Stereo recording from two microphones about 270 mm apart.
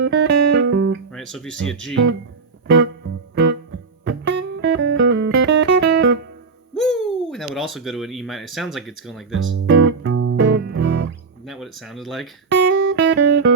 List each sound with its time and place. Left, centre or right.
0.0 s music: right
1.1 s speech: centre
1.5 s speech: right
2.6 s music: right
6.7 s hoot: centre
9.3 s music: right
11.4 s speech: centre
12.5 s guitar: right